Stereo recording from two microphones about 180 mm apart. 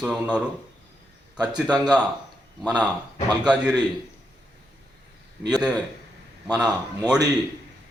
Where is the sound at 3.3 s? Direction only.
5° right (ahead or behind).